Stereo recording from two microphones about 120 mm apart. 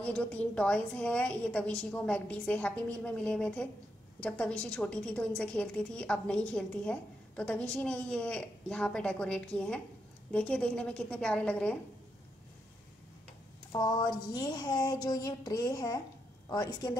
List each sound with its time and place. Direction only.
0.0 s a woman's voice: 10° left (ahead or behind)
13.7 s speech: 35° left (ahead or behind)